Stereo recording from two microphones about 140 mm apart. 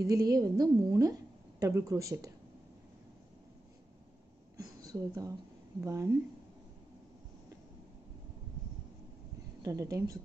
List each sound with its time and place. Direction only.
0.0 s a woman's voice: 25° right (ahead or behind)
4.6 s a sound: 25° right (ahead or behind)
5.9 s a woman's voice: 20° right (ahead or behind)
9.6 s speech: 25° right (ahead or behind)